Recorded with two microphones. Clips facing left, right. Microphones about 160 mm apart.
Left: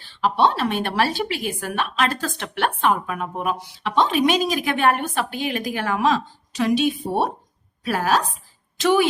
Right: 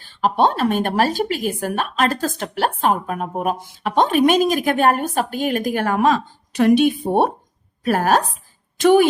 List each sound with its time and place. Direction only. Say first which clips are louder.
0.0 s speech: right 2 dB; 45° right (ahead or behind)